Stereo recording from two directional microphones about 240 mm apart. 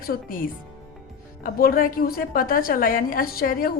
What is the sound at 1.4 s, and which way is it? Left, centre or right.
A woman's voice, left.